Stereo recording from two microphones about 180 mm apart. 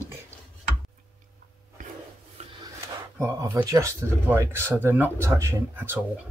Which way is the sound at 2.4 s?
35° right (ahead or behind).